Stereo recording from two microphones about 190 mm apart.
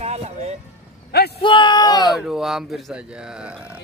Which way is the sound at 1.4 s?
25° left (ahead or behind).